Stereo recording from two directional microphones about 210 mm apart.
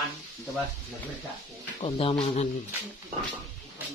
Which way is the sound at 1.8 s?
25° left (ahead or behind).